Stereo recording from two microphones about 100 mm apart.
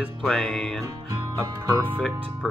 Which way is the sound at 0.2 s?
5° left (ahead or behind).